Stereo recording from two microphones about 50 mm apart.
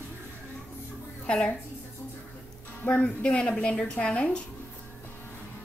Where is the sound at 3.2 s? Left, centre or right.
Centre.